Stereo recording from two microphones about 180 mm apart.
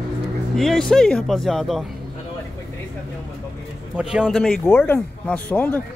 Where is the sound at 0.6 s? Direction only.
Centre (ahead or behind).